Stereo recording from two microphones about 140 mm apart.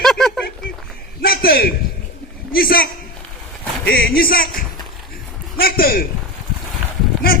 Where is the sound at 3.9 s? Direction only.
90° left.